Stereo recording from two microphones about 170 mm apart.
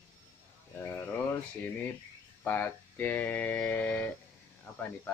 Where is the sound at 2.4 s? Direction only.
10° left (ahead or behind).